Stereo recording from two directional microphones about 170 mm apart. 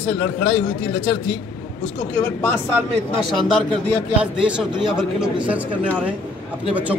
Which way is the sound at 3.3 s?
5° left (ahead or behind).